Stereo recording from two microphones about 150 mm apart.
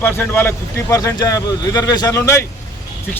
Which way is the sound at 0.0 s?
15° left (ahead or behind).